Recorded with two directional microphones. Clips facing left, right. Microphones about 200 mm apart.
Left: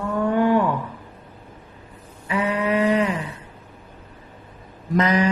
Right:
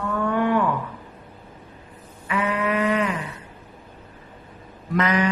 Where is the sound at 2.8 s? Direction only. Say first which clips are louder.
Left 3 dB; 30° left (ahead or behind).